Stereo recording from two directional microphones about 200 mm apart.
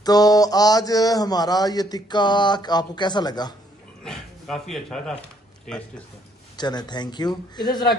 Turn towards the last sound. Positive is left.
turn(degrees=20)  # may be behind; listen again after turning